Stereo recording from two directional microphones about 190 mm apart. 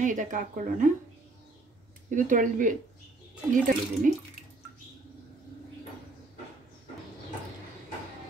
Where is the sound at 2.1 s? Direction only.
45° right (ahead or behind).